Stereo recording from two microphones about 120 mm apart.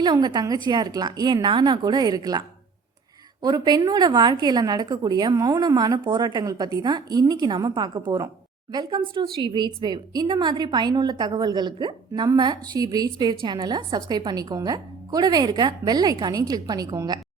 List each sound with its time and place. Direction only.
0.0 s a woman's voice: 40° right (ahead or behind)
3.4 s a woman's voice: 35° right (ahead or behind)